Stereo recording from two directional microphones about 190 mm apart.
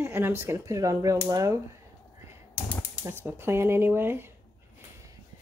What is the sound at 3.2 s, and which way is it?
Speech, 10° right (ahead or behind).